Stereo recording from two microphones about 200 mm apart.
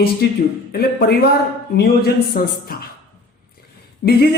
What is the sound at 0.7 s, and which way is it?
A woman's voice, 50° left (ahead or behind).